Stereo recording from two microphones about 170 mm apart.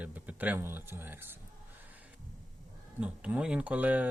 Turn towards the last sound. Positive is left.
turn(degrees=-10)  # may be behind; listen again after turning